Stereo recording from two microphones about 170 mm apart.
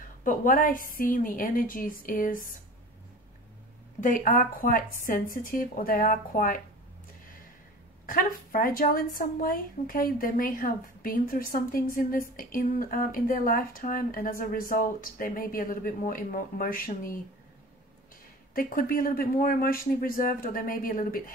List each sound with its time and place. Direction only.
0.2 s speech: 55° left (ahead or behind)
4.0 s speech: 50° left (ahead or behind)
8.1 s a woman's voice: 55° left (ahead or behind)
18.5 s a woman's voice: 60° left (ahead or behind)